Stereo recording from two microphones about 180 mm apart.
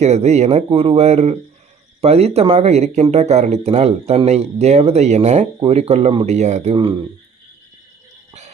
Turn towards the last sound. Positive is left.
turn(degrees=-30)  # may be behind; listen again after turning